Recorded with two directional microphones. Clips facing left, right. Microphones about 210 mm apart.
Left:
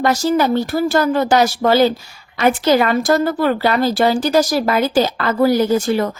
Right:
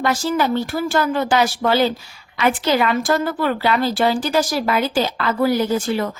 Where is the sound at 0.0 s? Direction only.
40° left (ahead or behind).